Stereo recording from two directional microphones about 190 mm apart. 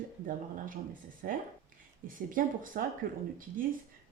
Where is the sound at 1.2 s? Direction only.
50° right (ahead or behind).